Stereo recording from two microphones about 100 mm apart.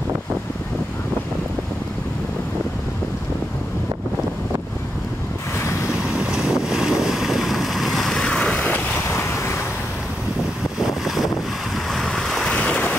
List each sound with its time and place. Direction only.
5.6 s waves: 30° left (ahead or behind)
6.0 s boat: 10° right (ahead or behind); by 8.5 s 10° left (ahead or behind)
8.5 s vehicle: 15° left (ahead or behind)
9.2 s vehicle: 30° left (ahead or behind)
10.8 s boat: 5° right (ahead or behind); by 12.9 s 15° left (ahead or behind)